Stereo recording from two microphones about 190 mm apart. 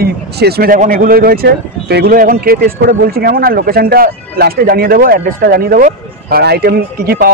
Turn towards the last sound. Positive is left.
turn(degrees=-50)  # may be behind; listen again after turning